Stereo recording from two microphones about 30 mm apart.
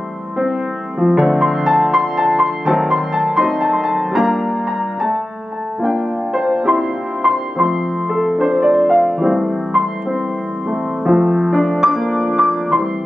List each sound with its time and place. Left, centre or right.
1.1 s music: centre
5.8 s music: centre
11.1 s music: centre
11.5 s music: centre